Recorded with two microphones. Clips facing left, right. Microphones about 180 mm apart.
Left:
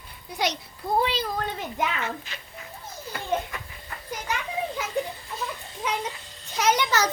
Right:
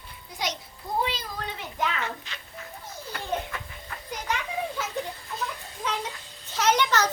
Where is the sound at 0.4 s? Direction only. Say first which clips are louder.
Left 5 dB; 70° left (ahead or behind).